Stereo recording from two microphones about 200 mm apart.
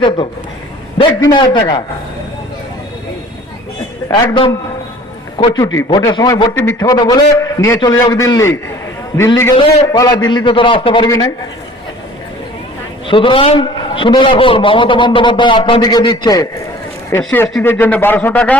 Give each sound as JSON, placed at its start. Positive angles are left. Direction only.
{"t": 0.9, "sound": "a man's voice", "side_deg": 20}
{"t": 4.1, "sound": "a man's voice", "side_deg": 25}
{"t": 13.1, "sound": "a man's voice", "side_deg": 25}
{"t": 17.2, "sound": "speech", "side_deg": 5}